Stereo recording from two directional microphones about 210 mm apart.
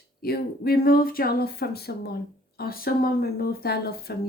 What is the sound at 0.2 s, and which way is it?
Speech, 45° left (ahead or behind).